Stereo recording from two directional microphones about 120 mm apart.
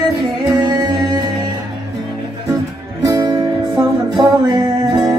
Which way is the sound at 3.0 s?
30° right (ahead or behind).